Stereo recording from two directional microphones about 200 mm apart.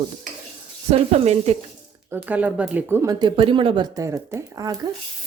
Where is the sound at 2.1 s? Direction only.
5° right (ahead or behind).